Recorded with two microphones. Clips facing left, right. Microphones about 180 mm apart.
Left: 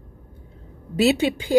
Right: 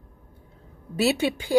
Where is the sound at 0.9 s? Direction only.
20° left (ahead or behind).